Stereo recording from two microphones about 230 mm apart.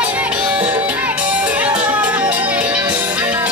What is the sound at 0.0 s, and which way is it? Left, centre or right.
Music, centre.